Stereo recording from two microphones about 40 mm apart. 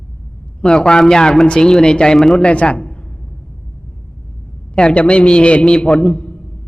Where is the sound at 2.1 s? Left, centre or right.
Centre.